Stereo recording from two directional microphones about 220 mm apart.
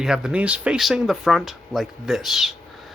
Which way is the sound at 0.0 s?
5° right (ahead or behind).